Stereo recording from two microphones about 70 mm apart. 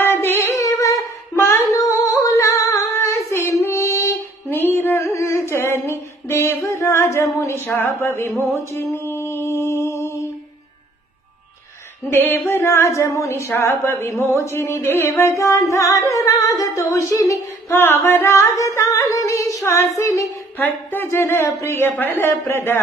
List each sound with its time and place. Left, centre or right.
0.0 s singing: left
0.6 s humming: left
1.3 s singing: left
1.8 s humming: left
2.3 s female singing: left
4.5 s a sound: left
8.7 s music: left
12.1 s speech: left
20.5 s a woman's voice: left